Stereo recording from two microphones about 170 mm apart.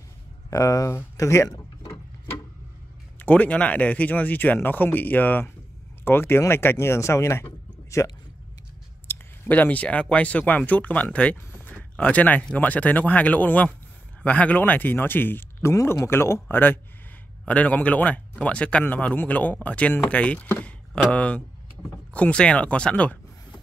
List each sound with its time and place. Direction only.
0.5 s drawer open or close: 20° left (ahead or behind)
3.2 s speech: 10° left (ahead or behind)